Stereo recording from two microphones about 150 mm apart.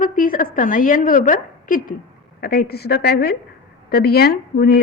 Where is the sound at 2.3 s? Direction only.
85° left.